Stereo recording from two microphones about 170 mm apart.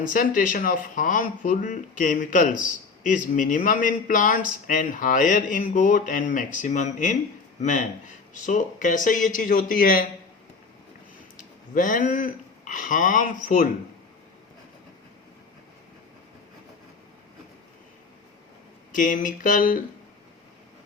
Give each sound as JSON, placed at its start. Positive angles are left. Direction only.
{"t": 0.0, "sound": "speech", "side_deg": 50}
{"t": 11.3, "sound": "speech", "side_deg": 55}
{"t": 18.9, "sound": "speech", "side_deg": 50}